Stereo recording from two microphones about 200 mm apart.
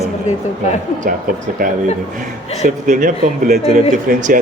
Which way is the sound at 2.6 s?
40° right (ahead or behind).